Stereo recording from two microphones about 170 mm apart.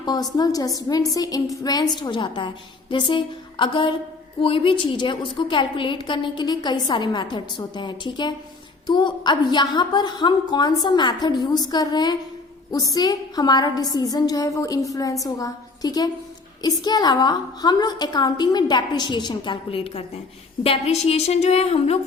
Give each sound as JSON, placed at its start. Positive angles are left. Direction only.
{"t": 0.0, "sound": "a woman's voice", "side_deg": 25}